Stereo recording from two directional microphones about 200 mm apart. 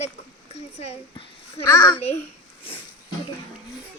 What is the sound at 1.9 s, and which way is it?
Speech, 30° left (ahead or behind).